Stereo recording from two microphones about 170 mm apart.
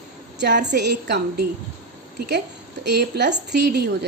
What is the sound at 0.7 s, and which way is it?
Speech, 80° right.